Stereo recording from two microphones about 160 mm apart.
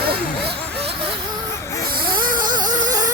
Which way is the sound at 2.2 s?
60° right (ahead or behind).